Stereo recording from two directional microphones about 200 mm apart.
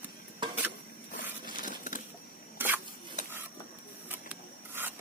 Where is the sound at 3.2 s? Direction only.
35° left (ahead or behind).